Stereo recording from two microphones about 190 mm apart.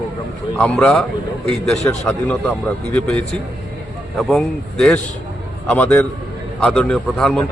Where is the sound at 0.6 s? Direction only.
5° left (ahead or behind).